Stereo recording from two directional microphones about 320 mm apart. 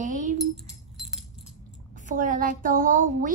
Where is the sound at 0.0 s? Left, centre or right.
Right.